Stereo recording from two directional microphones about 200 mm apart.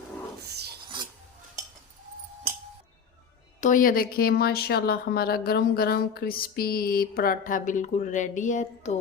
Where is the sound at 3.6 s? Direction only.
40° left (ahead or behind).